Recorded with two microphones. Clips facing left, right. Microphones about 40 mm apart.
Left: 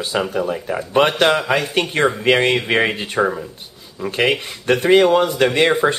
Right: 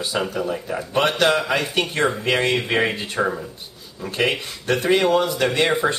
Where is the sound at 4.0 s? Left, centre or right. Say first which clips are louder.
Left 4 dB; left.